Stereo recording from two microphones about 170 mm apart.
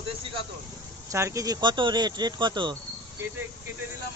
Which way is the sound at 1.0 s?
20° right (ahead or behind).